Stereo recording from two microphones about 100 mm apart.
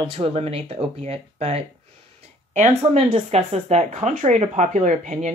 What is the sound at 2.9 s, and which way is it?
Speech, 85° right.